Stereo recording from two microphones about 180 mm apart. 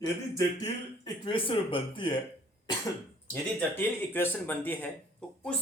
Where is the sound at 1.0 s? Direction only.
30° left (ahead or behind).